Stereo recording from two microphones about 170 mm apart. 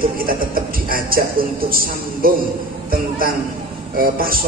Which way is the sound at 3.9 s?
60° right (ahead or behind).